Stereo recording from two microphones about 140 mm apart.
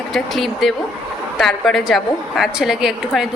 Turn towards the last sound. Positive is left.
turn(degrees=-5)  # may be behind; listen again after turning